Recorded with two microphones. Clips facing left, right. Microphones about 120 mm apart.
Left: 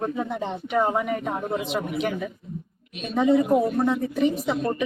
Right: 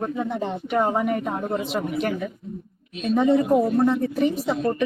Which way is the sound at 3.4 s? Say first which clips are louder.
Right 1 dB; 20° left (ahead or behind).